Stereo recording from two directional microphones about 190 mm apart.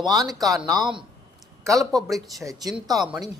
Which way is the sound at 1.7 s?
Centre (ahead or behind).